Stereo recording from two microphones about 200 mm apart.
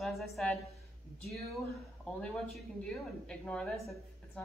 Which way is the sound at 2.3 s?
5° left (ahead or behind).